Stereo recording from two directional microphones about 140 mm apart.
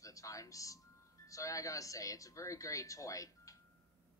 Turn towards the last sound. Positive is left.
turn(degrees=25)  # may be behind; listen again after turning